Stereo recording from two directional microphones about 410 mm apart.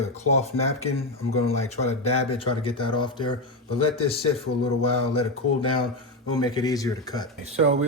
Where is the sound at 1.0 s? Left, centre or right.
Centre.